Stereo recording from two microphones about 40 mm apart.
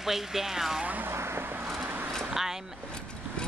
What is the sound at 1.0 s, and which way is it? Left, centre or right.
Vehicle, right.